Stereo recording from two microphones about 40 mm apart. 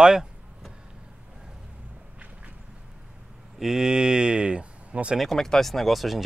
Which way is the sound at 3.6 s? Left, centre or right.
Centre.